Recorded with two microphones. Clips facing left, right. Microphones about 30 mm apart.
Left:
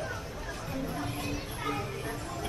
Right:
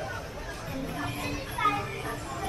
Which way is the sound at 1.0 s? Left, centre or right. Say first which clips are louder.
Right 2 dB; right.